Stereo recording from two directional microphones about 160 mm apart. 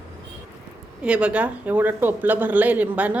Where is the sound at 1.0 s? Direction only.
10° right (ahead or behind).